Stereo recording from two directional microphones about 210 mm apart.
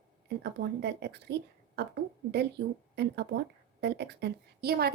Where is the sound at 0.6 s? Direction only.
50° right (ahead or behind).